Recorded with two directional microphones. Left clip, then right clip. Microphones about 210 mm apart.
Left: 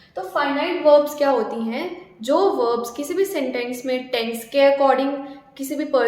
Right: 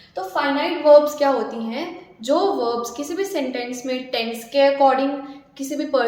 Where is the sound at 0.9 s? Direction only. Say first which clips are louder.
Right 2 dB; 20° left (ahead or behind).